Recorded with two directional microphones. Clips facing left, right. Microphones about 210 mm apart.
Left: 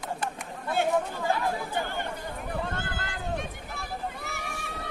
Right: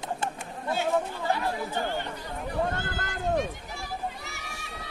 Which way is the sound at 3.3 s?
55° left (ahead or behind).